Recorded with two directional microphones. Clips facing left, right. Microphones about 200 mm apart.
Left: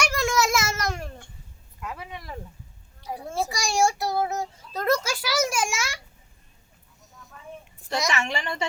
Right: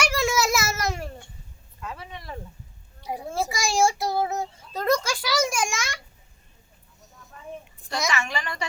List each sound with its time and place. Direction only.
0.0 s a sound: 5° right (ahead or behind)
1.8 s speech: 10° left (ahead or behind)
3.1 s a child's voice: 20° right (ahead or behind)
3.5 s a child's voice: centre (ahead or behind)
8.1 s a woman's voice: 25° left (ahead or behind)